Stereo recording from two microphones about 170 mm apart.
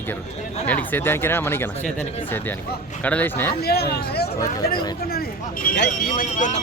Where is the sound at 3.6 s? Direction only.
70° left (ahead or behind).